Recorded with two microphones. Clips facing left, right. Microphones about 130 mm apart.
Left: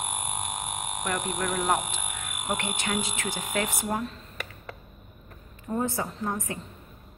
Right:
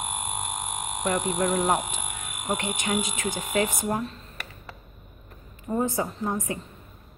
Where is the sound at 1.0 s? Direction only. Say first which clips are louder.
Right 5 dB; 25° right (ahead or behind).